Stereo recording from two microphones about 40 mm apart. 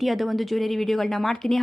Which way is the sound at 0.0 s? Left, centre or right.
Centre.